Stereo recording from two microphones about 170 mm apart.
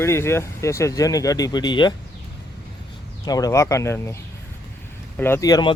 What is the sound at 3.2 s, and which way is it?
Speech, 20° left (ahead or behind).